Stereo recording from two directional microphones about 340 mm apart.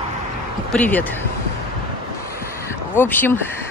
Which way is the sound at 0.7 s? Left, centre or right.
Centre.